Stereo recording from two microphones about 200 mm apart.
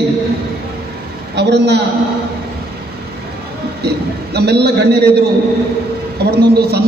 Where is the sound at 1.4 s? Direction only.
60° right (ahead or behind).